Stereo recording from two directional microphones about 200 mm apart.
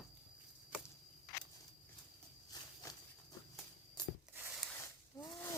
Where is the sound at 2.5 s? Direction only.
20° left (ahead or behind).